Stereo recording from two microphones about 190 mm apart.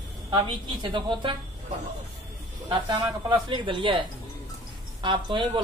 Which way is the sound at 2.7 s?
25° right (ahead or behind).